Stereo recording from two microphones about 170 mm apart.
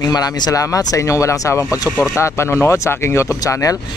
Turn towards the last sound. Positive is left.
turn(degrees=20)  # may be behind; listen again after turning